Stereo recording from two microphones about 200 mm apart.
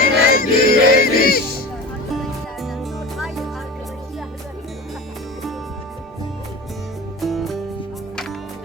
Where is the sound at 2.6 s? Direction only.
Centre (ahead or behind).